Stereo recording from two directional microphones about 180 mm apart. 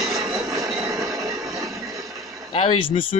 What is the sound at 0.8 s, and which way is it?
Train, 15° right (ahead or behind).